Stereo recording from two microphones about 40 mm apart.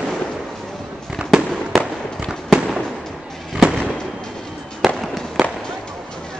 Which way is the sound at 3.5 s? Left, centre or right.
Centre.